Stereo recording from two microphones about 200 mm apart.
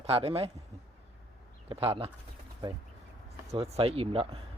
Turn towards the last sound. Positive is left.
turn(degrees=-30)  # may be behind; listen again after turning